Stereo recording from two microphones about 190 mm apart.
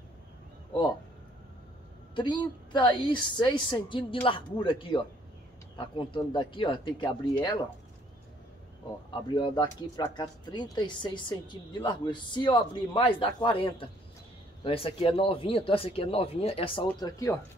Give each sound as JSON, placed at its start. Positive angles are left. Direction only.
{"t": 2.1, "sound": "speech", "side_deg": 25}
{"t": 9.3, "sound": "speech", "side_deg": 25}